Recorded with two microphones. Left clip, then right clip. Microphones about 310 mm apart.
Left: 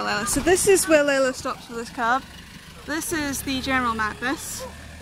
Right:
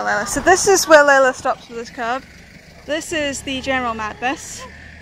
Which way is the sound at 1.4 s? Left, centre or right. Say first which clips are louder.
Right 8 dB; centre.